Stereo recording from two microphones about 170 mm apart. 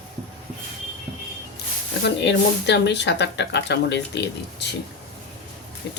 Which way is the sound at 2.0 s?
90° left.